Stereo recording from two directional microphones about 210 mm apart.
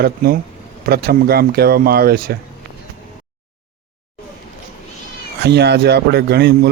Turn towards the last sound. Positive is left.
turn(degrees=-50)  # may be behind; listen again after turning